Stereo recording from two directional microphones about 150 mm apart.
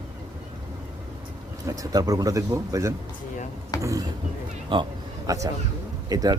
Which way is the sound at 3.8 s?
20° right (ahead or behind).